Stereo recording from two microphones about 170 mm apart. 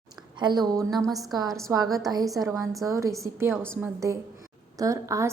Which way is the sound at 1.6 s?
20° right (ahead or behind).